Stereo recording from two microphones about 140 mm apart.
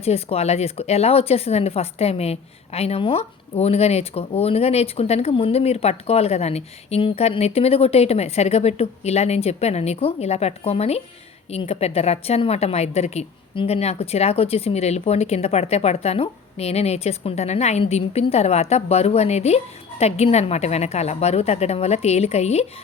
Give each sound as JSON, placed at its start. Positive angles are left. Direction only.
{"t": 0.0, "sound": "speech", "side_deg": 45}